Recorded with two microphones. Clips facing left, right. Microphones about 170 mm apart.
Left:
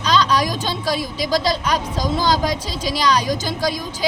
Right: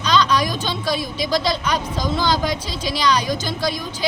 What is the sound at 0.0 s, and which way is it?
A woman's voice, 35° left (ahead or behind).